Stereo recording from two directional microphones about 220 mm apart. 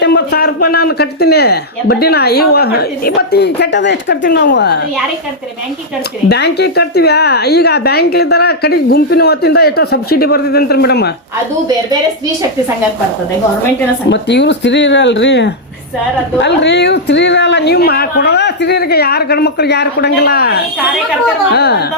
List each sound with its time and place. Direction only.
0.0 s a woman's voice: 45° left (ahead or behind)
6.2 s a woman's voice: 50° left (ahead or behind)
14.1 s a woman's voice: 50° left (ahead or behind)